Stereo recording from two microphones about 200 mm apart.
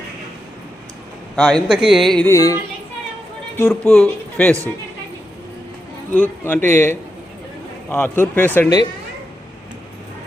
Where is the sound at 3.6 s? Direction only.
10° left (ahead or behind).